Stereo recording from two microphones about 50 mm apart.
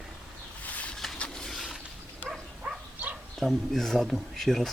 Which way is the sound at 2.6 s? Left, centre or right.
Right.